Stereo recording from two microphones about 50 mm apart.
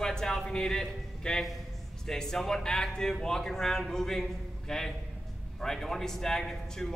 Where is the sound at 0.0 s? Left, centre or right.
Centre.